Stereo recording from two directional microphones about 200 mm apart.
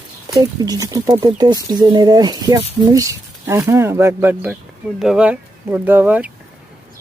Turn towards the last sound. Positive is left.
turn(degrees=-10)  # may be behind; listen again after turning